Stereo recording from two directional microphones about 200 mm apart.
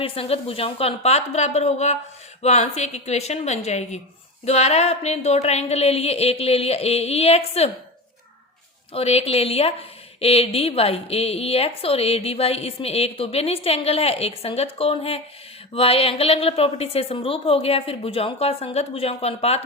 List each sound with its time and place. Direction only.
0.0 s speech: 30° left (ahead or behind)
8.9 s a woman's voice: 30° left (ahead or behind)